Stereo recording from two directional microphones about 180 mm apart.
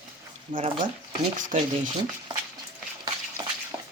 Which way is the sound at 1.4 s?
45° right (ahead or behind).